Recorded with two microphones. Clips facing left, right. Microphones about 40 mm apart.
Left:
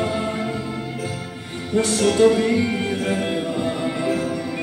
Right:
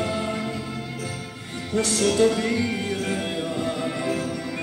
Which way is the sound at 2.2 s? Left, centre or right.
Left.